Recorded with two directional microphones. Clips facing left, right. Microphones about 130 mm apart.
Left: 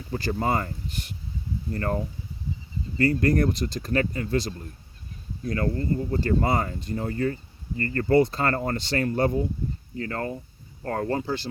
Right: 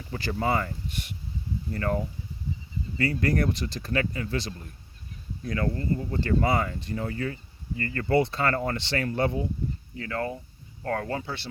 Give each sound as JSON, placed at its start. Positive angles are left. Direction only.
{"t": 0.1, "sound": "speech", "side_deg": 35}
{"t": 3.0, "sound": "speech", "side_deg": 40}